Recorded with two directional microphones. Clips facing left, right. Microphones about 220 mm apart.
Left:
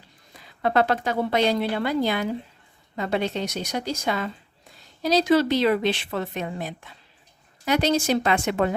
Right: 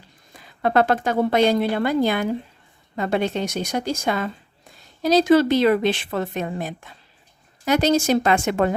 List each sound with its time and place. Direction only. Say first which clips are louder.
0.3 s a woman's voice: right 3 dB; 50° right (ahead or behind)